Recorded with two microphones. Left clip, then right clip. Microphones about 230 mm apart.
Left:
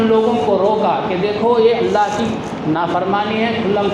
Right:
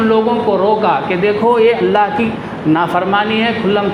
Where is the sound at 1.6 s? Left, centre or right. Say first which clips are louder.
Right 2 dB; right.